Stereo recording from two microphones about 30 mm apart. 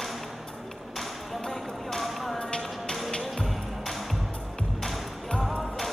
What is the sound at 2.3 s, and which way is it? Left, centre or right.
Music, left.